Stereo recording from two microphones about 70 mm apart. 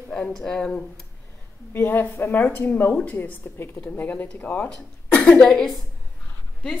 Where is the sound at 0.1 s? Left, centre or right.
Centre.